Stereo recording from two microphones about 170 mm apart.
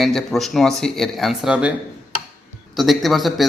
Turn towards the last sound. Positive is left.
turn(degrees=0)  # may be behind; listen again after turning